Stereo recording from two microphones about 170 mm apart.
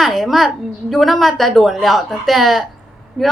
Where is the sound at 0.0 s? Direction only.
Centre (ahead or behind).